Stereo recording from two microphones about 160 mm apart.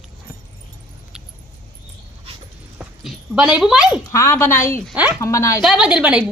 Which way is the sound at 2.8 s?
5° right (ahead or behind).